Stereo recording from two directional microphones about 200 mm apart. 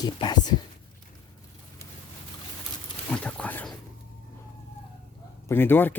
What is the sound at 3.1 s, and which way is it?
Speech, 5° left (ahead or behind).